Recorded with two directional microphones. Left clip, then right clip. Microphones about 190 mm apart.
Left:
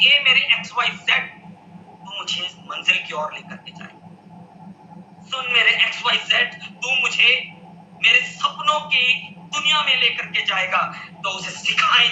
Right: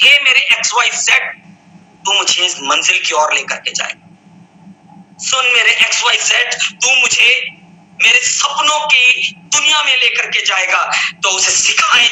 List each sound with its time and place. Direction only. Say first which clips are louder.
0.0 s a sound: right 6 dB; 45° right (ahead or behind)
2.0 s speech: right 14 dB; 45° right (ahead or behind)
5.3 s speech: right 7 dB; 45° right (ahead or behind)